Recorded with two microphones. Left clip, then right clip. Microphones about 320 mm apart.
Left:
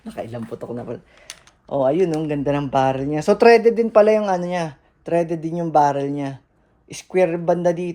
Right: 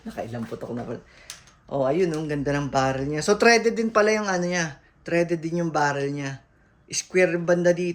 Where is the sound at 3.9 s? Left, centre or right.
Centre.